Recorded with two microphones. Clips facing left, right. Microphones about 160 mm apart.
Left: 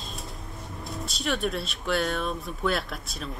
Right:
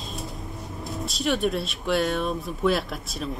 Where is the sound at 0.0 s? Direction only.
Centre (ahead or behind).